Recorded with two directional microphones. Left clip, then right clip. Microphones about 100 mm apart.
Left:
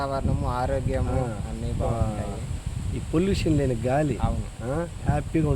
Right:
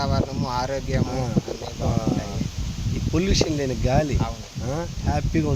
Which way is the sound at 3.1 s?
5° right (ahead or behind).